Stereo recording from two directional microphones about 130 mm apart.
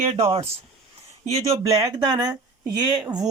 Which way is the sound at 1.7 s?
30° right (ahead or behind).